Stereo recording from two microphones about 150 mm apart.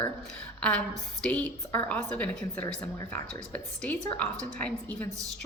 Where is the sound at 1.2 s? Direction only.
10° left (ahead or behind).